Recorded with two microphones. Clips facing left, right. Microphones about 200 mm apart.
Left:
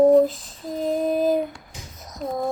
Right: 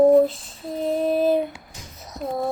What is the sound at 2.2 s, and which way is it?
Speech, 5° right (ahead or behind).